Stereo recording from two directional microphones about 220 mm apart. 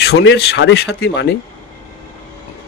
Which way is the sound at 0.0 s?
50° left (ahead or behind).